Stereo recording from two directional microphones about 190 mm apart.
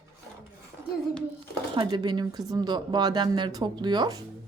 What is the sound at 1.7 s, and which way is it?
A woman's voice, 25° right (ahead or behind).